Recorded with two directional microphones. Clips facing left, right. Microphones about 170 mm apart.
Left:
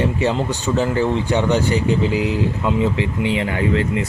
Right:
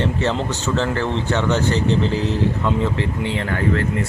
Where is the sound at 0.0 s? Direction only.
10° left (ahead or behind).